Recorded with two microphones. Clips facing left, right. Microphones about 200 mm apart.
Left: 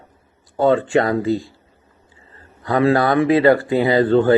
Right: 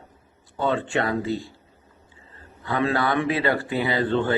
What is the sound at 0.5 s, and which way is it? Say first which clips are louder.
Speech: left 8 dB; 40° left (ahead or behind).